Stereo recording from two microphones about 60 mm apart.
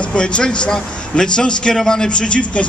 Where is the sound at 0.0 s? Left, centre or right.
Centre.